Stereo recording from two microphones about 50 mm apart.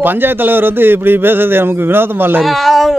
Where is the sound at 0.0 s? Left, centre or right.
Right.